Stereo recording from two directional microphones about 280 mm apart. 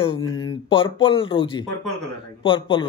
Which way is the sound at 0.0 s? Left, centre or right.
Centre.